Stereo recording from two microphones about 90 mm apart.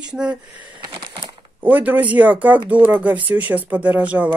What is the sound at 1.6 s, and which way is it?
Speech, 20° right (ahead or behind).